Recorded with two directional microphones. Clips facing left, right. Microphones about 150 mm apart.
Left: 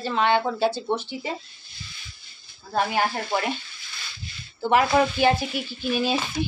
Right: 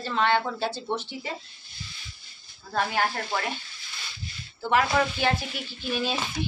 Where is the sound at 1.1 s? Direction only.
20° left (ahead or behind).